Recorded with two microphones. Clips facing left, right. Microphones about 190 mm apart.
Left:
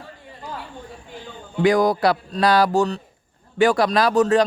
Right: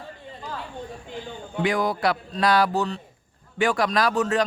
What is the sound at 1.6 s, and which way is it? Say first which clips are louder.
Speech: left 6 dB; 40° left (ahead or behind).